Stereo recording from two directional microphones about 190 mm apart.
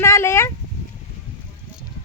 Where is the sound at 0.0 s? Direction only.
15° left (ahead or behind).